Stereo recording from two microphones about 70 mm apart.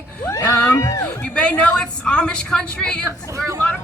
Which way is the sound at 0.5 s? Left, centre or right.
Left.